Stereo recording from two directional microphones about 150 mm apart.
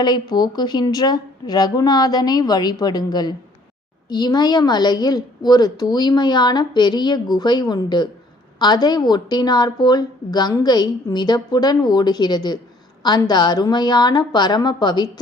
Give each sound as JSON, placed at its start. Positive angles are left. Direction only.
{"t": 0.0, "sound": "a woman's voice", "side_deg": 30}